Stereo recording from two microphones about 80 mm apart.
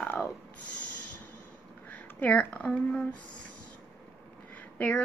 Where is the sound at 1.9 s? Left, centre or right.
Centre.